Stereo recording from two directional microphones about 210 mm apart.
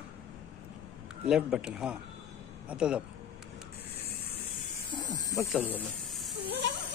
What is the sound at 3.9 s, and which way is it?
Spray, 50° left (ahead or behind).